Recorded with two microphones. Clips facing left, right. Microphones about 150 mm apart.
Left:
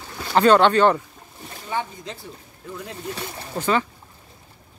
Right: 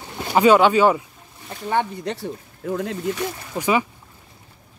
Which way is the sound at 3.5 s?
10° right (ahead or behind).